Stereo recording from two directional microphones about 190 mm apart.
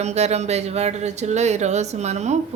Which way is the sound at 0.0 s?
35° right (ahead or behind).